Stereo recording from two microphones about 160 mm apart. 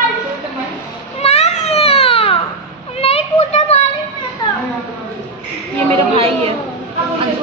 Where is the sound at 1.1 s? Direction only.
40° left (ahead or behind).